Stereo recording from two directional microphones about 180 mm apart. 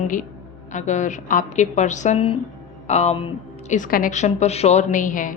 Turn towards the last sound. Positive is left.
turn(degrees=45)  # may be behind; listen again after turning